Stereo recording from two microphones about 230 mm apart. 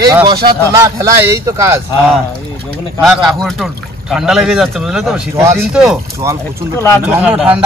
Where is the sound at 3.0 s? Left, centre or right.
Centre.